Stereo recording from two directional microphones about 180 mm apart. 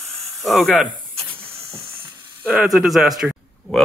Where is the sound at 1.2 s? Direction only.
30° right (ahead or behind).